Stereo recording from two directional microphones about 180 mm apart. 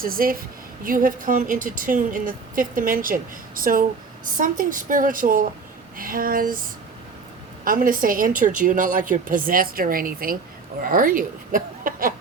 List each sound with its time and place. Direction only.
0.0 s a woman's voice: 55° right (ahead or behind)